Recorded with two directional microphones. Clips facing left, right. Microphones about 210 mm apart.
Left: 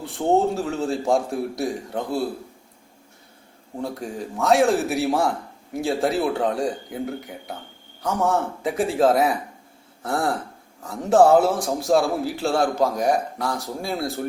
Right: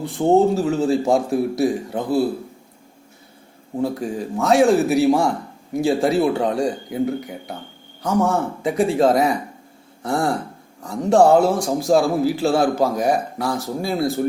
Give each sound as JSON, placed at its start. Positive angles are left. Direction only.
{"t": 0.0, "sound": "a man's voice", "side_deg": 0}
{"t": 3.8, "sound": "a man's voice", "side_deg": 0}